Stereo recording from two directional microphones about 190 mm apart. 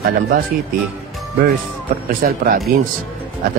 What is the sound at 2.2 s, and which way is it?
Speech, 45° right (ahead or behind).